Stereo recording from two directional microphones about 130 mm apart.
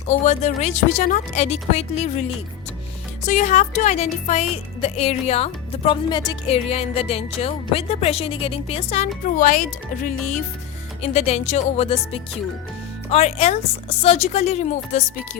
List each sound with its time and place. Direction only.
0.1 s a woman's voice: 65° left (ahead or behind)
3.2 s speech: 70° left (ahead or behind); by 6.3 s 35° left (ahead or behind)
6.5 s speech: 50° left (ahead or behind)
9.4 s a woman's voice: 90° left; by 15.0 s 65° left (ahead or behind)